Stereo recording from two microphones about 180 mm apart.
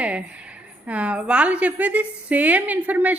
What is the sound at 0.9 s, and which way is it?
A woman's voice, 5° right (ahead or behind).